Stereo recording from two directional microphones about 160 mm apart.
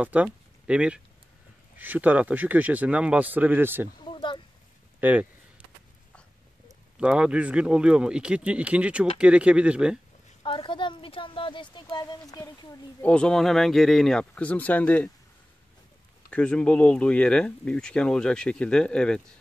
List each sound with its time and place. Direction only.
0.0 s speech: 10° right (ahead or behind)
4.1 s a sound: 30° left (ahead or behind)
5.0 s speech: 10° right (ahead or behind)
7.0 s speech: 5° right (ahead or behind)
10.4 s a woman's voice: 30° left (ahead or behind)
13.0 s speech: 5° left (ahead or behind)
16.3 s speech: 5° left (ahead or behind)